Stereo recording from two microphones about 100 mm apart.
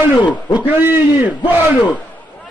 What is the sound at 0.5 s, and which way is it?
A man's voice, 15° right (ahead or behind).